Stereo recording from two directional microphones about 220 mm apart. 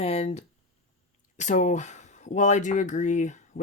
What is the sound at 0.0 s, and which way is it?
Speech, 30° left (ahead or behind).